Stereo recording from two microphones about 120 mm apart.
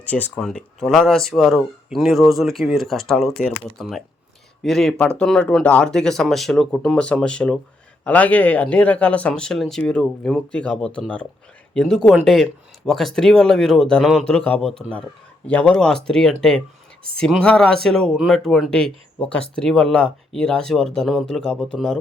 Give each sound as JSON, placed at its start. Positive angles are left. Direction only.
{"t": 0.1, "sound": "speech", "side_deg": 15}
{"t": 0.4, "sound": "speech", "side_deg": 5}